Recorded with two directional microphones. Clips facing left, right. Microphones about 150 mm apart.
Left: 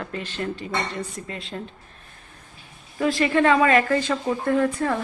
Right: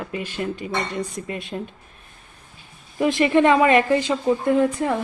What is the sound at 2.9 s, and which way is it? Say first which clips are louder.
A woman's voice: right 3 dB; 20° right (ahead or behind).